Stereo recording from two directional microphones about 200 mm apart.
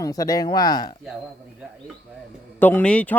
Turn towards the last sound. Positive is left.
turn(degrees=5)  # may be behind; listen again after turning